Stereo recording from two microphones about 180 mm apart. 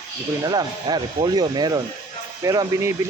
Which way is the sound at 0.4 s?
20° right (ahead or behind).